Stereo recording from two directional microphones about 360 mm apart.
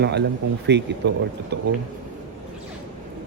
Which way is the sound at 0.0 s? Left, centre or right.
Right.